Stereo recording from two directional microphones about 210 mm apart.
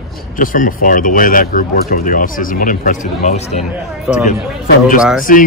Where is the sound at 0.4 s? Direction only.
40° left (ahead or behind).